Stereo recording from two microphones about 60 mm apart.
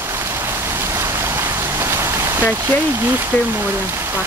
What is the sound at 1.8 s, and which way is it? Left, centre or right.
Rain, right.